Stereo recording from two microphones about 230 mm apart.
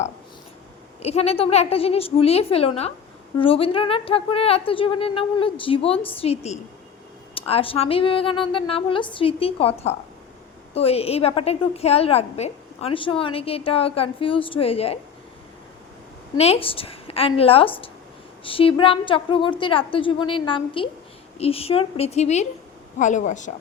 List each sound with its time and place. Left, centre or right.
1.0 s a woman's voice: left
16.4 s a woman's voice: left